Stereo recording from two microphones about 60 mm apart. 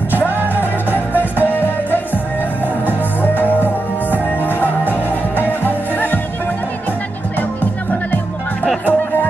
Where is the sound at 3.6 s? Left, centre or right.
Right.